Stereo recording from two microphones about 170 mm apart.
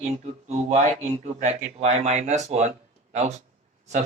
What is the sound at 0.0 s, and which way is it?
Speech, 40° right (ahead or behind).